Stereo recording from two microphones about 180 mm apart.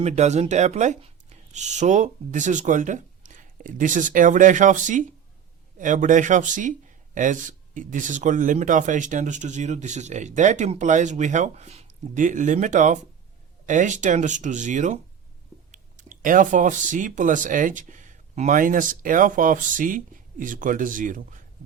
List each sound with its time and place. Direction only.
0.0 s speech: 40° right (ahead or behind)